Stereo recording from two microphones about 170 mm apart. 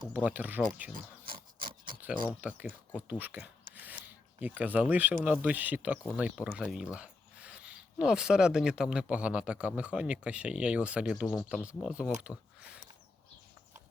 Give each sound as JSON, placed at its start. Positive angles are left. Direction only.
{"t": 0.1, "sound": "speech", "side_deg": -10}
{"t": 0.9, "sound": "pig", "side_deg": -55}
{"t": 2.4, "sound": "speech", "side_deg": -10}
{"t": 3.8, "sound": "a sound", "side_deg": -10}
{"t": 5.2, "sound": "speech", "side_deg": -10}